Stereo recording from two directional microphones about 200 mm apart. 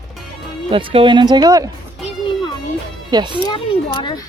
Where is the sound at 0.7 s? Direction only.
25° right (ahead or behind).